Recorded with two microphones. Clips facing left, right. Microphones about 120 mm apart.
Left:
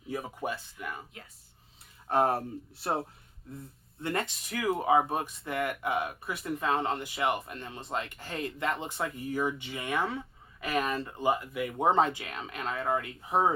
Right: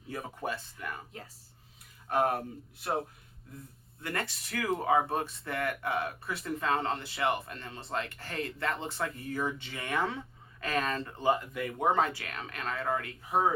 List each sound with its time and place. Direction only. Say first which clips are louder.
0.1 s speech: left 2 dB; 15° left (ahead or behind)
2.0 s speech: left 2 dB; 30° left (ahead or behind)
4.0 s speech: left 4 dB; 20° left (ahead or behind)
11.8 s speech: left 3 dB; 25° left (ahead or behind)